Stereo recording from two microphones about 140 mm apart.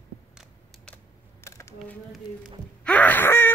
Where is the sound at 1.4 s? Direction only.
20° left (ahead or behind).